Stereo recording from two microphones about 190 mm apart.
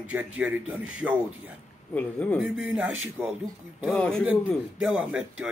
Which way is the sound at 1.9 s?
5° left (ahead or behind).